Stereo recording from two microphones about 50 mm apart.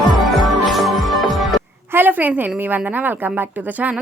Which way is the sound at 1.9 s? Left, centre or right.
Right.